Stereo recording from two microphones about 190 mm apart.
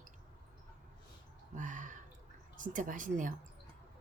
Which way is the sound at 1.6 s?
40° right (ahead or behind).